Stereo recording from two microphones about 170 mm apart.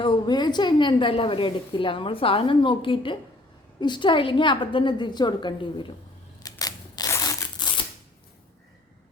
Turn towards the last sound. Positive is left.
turn(degrees=20)  # may be behind; listen again after turning